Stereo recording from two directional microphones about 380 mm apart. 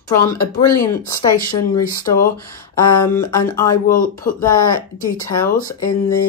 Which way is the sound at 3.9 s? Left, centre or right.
Left.